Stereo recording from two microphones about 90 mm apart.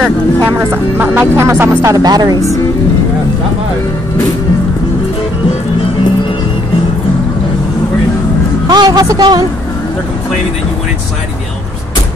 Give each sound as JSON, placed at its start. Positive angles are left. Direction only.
{"t": 0.6, "sound": "speech", "side_deg": -20}
{"t": 1.2, "sound": "speech", "side_deg": -35}
{"t": 1.8, "sound": "speech", "side_deg": -45}
{"t": 8.6, "sound": "speech", "side_deg": -50}